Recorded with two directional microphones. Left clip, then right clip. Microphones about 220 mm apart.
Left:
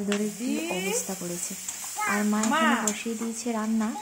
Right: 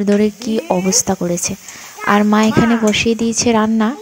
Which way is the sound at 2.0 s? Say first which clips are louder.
Right 14 dB; 35° right (ahead or behind).